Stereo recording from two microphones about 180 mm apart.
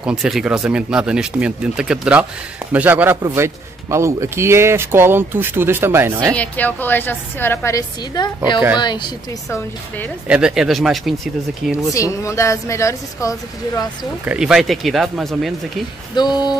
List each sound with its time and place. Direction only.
0.0 s a man's voice: 5° right (ahead or behind)
6.3 s a woman's voice: 10° left (ahead or behind); by 9.6 s 25° left (ahead or behind)
10.2 s speech: 5° right (ahead or behind)
11.9 s a woman's voice: 15° left (ahead or behind)
14.2 s speech: 5° right (ahead or behind)
16.2 s a woman's voice: 20° left (ahead or behind)